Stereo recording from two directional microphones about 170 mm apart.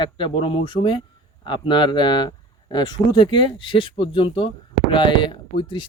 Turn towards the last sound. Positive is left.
turn(degrees=30)  # may be behind; listen again after turning